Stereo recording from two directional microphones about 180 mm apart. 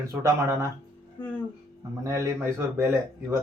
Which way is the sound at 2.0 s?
15° right (ahead or behind).